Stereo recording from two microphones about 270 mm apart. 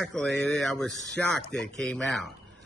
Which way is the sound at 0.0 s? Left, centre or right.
Centre.